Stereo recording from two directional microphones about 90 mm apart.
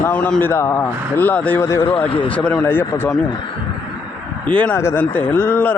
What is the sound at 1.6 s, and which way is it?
Speech, 30° left (ahead or behind).